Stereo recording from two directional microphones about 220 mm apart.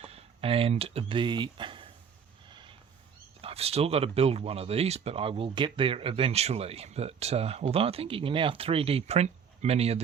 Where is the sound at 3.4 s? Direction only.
25° right (ahead or behind).